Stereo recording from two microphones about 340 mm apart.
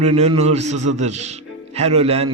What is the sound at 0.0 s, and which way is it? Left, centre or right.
A man's voice, centre.